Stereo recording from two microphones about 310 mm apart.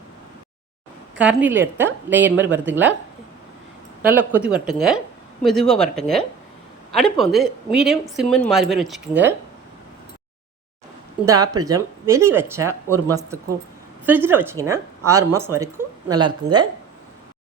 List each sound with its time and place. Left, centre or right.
1.1 s a woman's voice: centre
4.0 s a woman's voice: centre
11.3 s speech: centre